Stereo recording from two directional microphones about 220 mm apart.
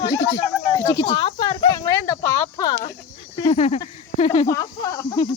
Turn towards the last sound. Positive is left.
turn(degrees=20)  # may be behind; listen again after turning